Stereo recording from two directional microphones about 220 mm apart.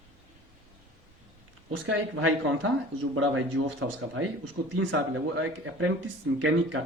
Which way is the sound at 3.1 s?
70° right (ahead or behind).